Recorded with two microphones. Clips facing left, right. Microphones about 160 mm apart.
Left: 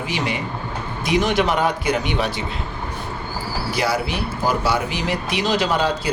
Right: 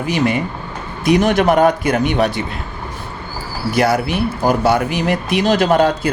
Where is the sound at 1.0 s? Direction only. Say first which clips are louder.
Right 6 dB; 50° right (ahead or behind).